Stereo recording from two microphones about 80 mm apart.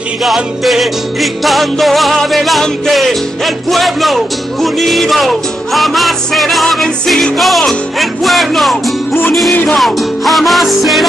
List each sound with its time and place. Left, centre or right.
0.2 s music: centre
9.5 s music: left
9.8 s music: centre